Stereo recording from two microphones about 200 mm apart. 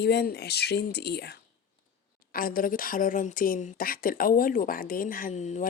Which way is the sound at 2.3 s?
45° left (ahead or behind).